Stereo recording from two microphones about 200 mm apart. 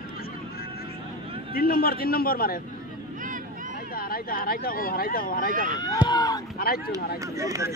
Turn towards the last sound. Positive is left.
turn(degrees=-15)  # may be behind; listen again after turning